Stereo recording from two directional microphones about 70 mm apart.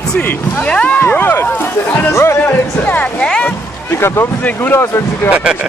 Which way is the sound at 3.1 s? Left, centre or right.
Centre.